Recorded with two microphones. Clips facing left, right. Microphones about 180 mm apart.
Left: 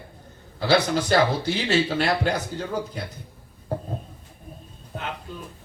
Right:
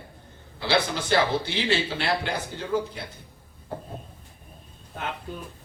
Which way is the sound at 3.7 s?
40° left (ahead or behind).